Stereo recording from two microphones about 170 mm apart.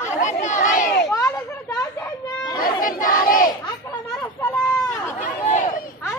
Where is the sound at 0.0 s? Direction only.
45° left (ahead or behind).